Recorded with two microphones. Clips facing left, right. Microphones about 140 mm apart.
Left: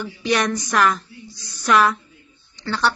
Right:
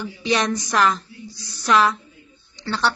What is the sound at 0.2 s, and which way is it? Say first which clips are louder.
A woman's voice: left 1 dB; 25° right (ahead or behind).